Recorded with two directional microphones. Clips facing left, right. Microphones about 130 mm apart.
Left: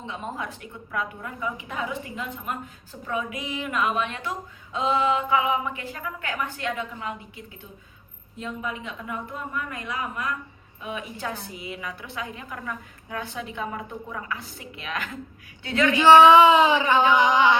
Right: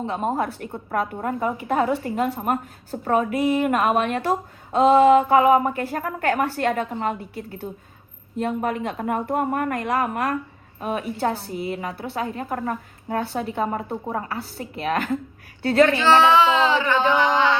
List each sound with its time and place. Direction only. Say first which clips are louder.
0.0 s a woman's voice: right 9 dB; 45° right (ahead or behind)
8.4 s a woman's voice: right 9 dB; 60° right (ahead or behind)
10.8 s a woman's voice: right 8 dB; 45° right (ahead or behind)
15.9 s speech: left 3 dB; 15° left (ahead or behind)